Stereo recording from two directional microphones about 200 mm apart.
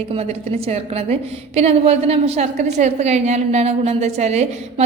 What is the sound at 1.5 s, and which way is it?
A woman's voice, 30° right (ahead or behind).